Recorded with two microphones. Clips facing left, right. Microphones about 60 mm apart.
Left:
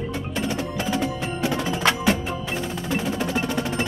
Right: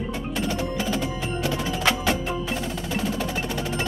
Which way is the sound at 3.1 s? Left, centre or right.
Centre.